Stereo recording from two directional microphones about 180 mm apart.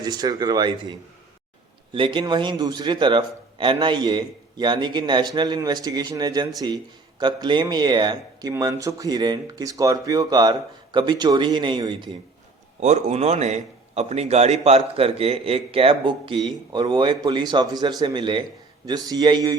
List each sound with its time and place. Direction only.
0.0 s speech: 20° right (ahead or behind)
12.8 s a man's voice: 40° right (ahead or behind); by 19.5 s 20° right (ahead or behind)